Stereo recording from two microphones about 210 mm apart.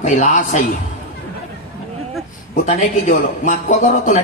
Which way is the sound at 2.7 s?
40° left (ahead or behind).